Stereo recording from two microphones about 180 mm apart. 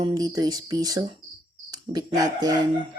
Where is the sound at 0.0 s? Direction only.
20° right (ahead or behind).